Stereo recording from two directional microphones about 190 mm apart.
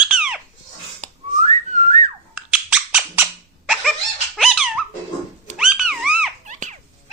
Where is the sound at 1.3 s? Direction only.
35° right (ahead or behind).